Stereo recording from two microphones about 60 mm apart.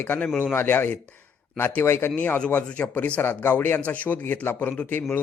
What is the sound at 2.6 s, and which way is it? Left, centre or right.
Speech, centre.